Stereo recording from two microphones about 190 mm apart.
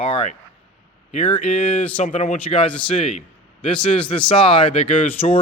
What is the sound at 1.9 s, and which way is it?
Speech, 35° left (ahead or behind).